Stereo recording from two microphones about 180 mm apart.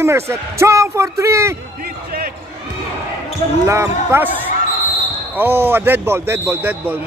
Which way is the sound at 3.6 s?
15° right (ahead or behind).